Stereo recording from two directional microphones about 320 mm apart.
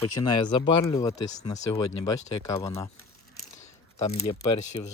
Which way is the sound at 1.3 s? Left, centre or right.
Left.